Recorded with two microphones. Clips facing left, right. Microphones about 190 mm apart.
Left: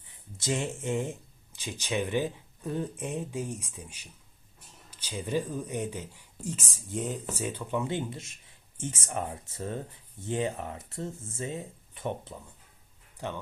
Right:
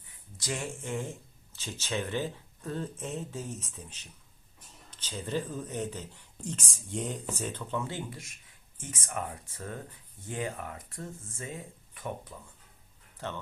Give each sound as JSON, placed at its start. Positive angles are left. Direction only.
{"t": 0.3, "sound": "speech", "side_deg": 25}
{"t": 13.1, "sound": "speech", "side_deg": 15}